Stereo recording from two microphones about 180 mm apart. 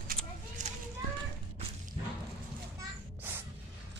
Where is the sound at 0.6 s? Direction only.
45° right (ahead or behind).